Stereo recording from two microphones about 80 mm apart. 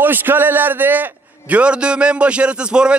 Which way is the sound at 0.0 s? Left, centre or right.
Right.